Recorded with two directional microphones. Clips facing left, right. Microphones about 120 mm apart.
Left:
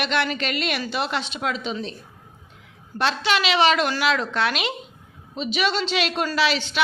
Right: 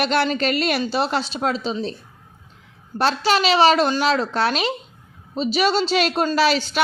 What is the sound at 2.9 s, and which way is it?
A woman's voice, 40° right (ahead or behind).